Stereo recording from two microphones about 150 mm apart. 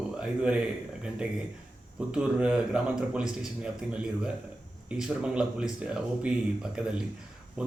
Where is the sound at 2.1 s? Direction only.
5° right (ahead or behind).